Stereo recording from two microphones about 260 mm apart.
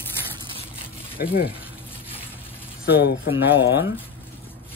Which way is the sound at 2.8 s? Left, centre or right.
Left.